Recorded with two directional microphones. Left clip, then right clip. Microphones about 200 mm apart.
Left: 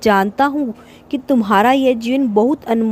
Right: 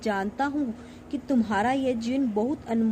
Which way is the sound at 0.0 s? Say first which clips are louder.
Left 14 dB; 50° left (ahead or behind).